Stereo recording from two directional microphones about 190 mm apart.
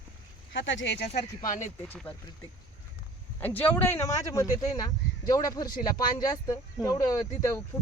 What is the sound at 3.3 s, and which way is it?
Speech, 10° left (ahead or behind).